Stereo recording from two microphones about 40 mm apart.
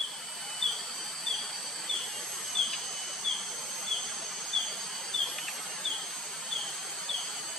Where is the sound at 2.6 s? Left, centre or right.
Centre.